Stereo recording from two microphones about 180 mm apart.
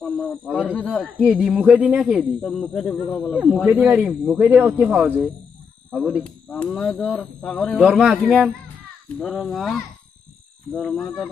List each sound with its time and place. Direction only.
0.0 s a man's voice: 5° left (ahead or behind)
3.4 s a man's voice: 5° right (ahead or behind)
7.8 s a man's voice: 5° right (ahead or behind)